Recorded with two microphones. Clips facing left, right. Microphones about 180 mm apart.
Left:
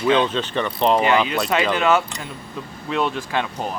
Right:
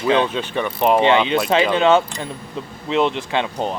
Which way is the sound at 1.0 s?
25° right (ahead or behind).